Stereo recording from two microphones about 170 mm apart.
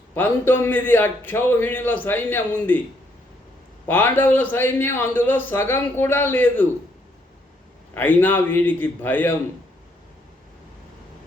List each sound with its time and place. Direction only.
0.1 s a man's voice: 10° left (ahead or behind)
3.8 s a man's voice: 10° left (ahead or behind)
7.9 s a man's voice: 10° left (ahead or behind)